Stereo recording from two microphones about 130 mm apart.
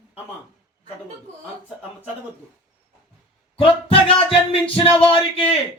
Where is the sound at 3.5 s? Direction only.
45° left (ahead or behind).